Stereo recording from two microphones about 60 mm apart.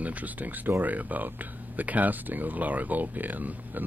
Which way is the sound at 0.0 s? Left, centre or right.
Right.